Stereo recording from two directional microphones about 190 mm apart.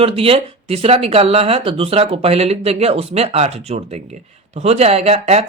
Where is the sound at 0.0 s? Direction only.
30° right (ahead or behind).